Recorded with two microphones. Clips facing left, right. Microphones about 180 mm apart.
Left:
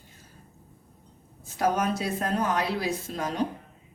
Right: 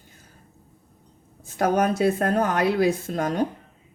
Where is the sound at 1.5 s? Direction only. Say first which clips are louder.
Right 5 dB; 50° right (ahead or behind).